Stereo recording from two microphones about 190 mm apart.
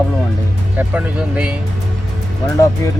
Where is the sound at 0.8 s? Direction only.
5° right (ahead or behind).